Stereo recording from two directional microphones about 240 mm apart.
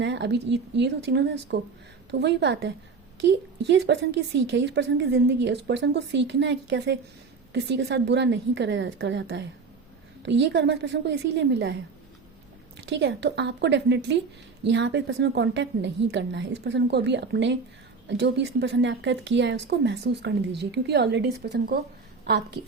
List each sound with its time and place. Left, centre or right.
0.0 s a woman's voice: right